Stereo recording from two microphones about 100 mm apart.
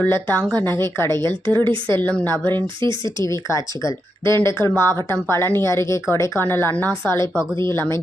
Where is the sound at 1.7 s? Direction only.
55° right (ahead or behind).